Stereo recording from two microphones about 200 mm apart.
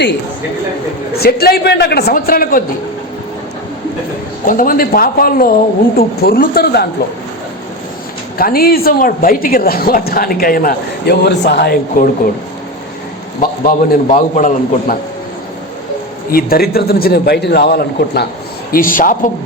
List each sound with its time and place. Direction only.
1.2 s speech: 50° left (ahead or behind)
4.4 s speech: 45° left (ahead or behind)
8.4 s speech: 50° left (ahead or behind)
13.7 s a man's voice: 40° left (ahead or behind)
16.3 s speech: 50° left (ahead or behind)